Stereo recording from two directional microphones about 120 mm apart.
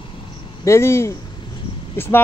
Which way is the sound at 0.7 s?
25° left (ahead or behind).